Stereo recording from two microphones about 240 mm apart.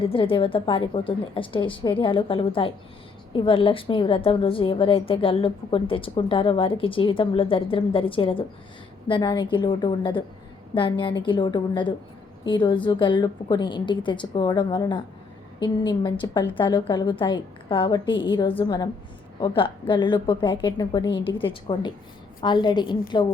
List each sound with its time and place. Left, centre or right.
0.0 s a woman's voice: left